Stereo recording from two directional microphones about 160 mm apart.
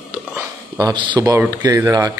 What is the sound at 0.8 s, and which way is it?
Speech, 25° right (ahead or behind).